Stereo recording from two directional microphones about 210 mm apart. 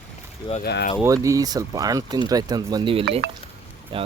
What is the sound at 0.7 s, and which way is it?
Speech, 50° left (ahead or behind).